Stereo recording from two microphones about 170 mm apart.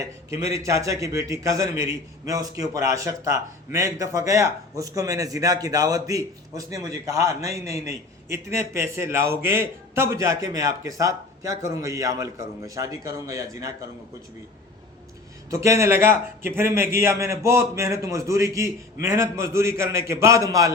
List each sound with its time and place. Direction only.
0.0 s a man's voice: 20° right (ahead or behind)
15.4 s a man's voice: 15° right (ahead or behind)